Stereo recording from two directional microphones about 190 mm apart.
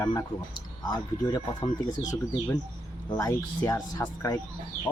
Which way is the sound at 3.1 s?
20° left (ahead or behind).